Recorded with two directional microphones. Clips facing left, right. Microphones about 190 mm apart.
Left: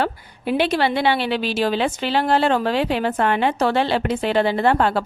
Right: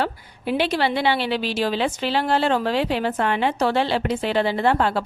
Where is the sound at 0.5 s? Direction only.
55° left (ahead or behind).